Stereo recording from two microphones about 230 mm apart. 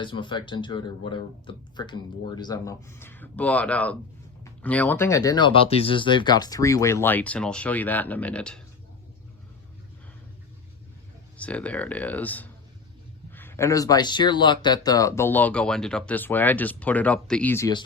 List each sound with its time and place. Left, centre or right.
0.0 s speech: left; by 8.6 s centre
11.3 s speech: centre